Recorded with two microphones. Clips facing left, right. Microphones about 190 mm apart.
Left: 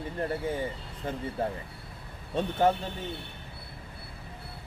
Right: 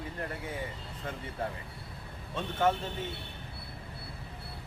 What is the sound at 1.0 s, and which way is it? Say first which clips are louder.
Speech: left 5 dB; 30° left (ahead or behind).